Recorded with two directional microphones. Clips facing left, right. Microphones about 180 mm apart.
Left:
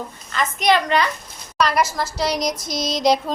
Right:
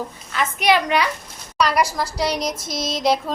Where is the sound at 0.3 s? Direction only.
10° right (ahead or behind).